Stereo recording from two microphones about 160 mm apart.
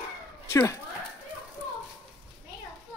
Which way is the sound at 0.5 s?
20° left (ahead or behind).